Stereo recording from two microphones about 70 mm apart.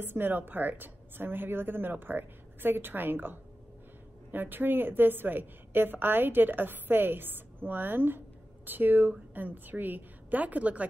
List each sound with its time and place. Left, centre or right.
0.0 s a woman's voice: right